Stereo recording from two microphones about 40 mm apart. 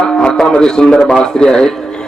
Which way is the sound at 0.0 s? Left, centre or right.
Centre.